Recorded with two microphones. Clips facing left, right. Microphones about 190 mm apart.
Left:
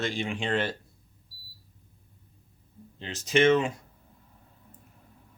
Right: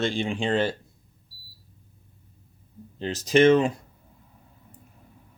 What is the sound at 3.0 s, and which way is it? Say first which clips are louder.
Speech: right 5 dB; 40° right (ahead or behind).